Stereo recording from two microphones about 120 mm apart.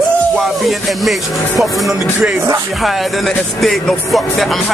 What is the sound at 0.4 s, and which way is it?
Music, centre (ahead or behind).